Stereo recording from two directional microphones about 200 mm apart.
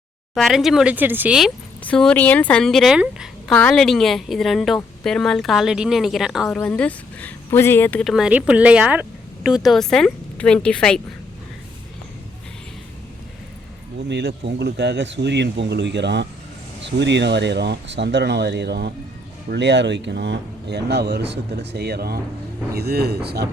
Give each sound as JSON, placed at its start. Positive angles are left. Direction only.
{"t": 0.3, "sound": "a woman's voice", "side_deg": 0}
{"t": 14.1, "sound": "speech", "side_deg": -60}